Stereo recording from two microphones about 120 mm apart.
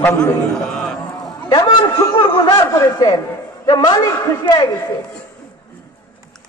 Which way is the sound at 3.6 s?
40° left (ahead or behind).